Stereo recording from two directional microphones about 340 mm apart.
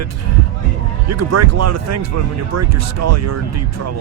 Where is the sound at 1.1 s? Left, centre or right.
Right.